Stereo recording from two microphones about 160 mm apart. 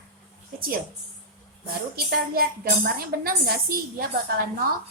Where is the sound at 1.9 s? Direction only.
70° right (ahead or behind).